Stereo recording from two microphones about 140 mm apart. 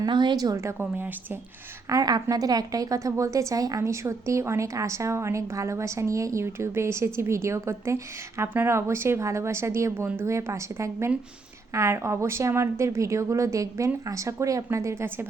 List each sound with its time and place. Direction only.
0.0 s a woman's voice: 35° right (ahead or behind); by 1.4 s 15° right (ahead or behind)
1.9 s a woman's voice: 25° right (ahead or behind)